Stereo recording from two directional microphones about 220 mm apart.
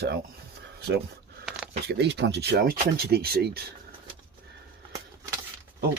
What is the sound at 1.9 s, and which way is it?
Speech, 50° right (ahead or behind).